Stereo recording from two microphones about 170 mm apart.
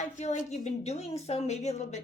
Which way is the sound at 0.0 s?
45° left (ahead or behind).